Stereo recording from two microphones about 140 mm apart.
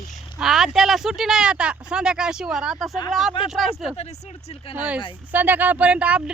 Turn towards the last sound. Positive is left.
turn(degrees=-10)  # may be behind; listen again after turning